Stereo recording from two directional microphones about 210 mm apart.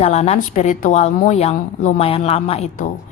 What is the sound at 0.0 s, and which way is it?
A woman's voice, 30° left (ahead or behind).